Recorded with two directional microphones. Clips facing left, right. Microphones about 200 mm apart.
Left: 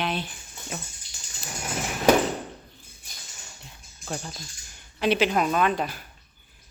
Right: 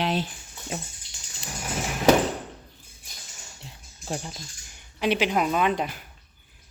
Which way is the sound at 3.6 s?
25° right (ahead or behind).